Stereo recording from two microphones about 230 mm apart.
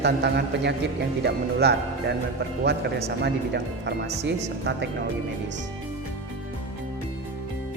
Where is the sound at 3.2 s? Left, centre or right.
Right.